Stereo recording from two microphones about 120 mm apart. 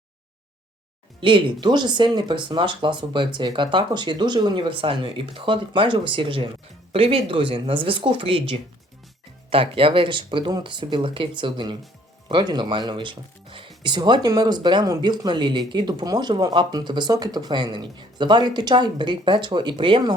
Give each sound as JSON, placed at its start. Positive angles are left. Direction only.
{"t": 1.2, "sound": "speech", "side_deg": -45}